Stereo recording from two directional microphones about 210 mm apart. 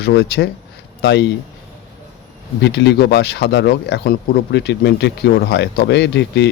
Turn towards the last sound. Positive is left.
turn(degrees=55)  # may be behind; listen again after turning